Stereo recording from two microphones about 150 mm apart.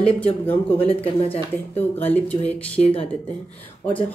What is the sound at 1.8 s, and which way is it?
Speech, 10° left (ahead or behind).